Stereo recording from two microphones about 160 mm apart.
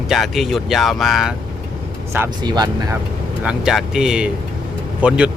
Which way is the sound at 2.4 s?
25° right (ahead or behind).